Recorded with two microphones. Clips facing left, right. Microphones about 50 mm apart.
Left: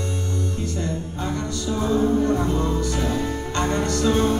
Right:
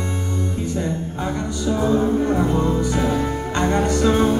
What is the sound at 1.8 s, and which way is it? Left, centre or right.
Music, centre.